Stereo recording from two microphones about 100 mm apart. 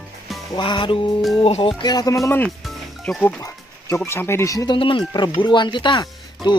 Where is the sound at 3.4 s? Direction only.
30° left (ahead or behind).